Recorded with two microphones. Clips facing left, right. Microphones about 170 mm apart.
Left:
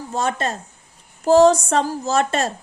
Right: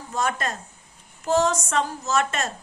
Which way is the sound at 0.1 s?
30° left (ahead or behind).